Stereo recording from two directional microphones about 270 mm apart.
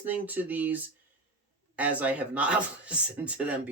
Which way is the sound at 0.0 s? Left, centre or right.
Centre.